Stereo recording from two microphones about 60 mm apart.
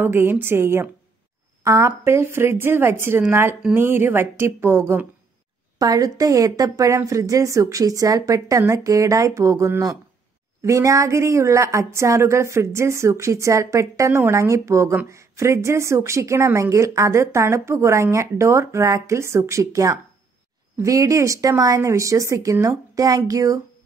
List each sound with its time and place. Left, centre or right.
0.0 s speech: right
1.6 s speech: right
5.8 s a woman's voice: right
6.9 s speech: right
8.5 s speech: right
8.8 s speech: right
10.6 s speech: right